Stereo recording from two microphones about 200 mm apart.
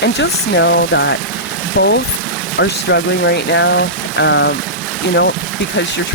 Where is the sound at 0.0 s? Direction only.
60° left (ahead or behind).